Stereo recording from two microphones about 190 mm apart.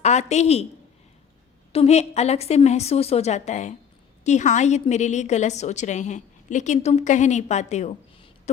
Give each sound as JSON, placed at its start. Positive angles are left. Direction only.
{"t": 0.0, "sound": "a woman's voice", "side_deg": 35}
{"t": 1.7, "sound": "a woman's voice", "side_deg": 35}